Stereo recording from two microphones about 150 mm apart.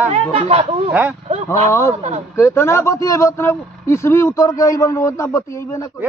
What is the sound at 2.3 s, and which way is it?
A man's voice, 15° left (ahead or behind).